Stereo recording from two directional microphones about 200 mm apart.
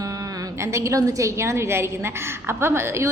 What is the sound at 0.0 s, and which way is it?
A woman's voice, 15° right (ahead or behind).